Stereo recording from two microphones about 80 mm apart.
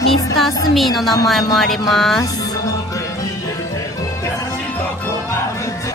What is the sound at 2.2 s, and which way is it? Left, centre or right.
Music, left.